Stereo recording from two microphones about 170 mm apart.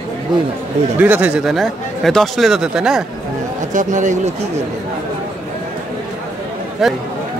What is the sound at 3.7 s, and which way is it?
Speech, 45° right (ahead or behind).